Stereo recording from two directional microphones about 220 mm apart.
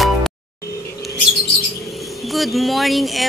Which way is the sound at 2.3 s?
Centre (ahead or behind).